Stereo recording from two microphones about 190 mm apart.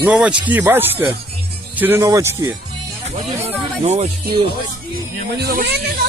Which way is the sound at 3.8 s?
30° right (ahead or behind).